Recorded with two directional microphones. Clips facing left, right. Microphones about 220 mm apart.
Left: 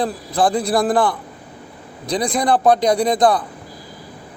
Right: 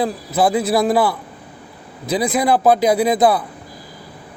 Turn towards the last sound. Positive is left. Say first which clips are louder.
# right 1 dB
turn(degrees=-5)  # may be behind; listen again after turning